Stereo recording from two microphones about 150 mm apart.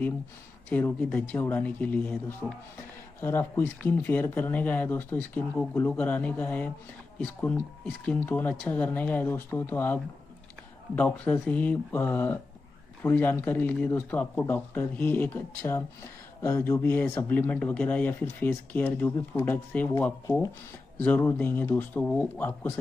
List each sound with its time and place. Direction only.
0.7 s speech: 10° left (ahead or behind)
11.0 s speech: 10° left (ahead or behind)
21.0 s speech: 15° left (ahead or behind)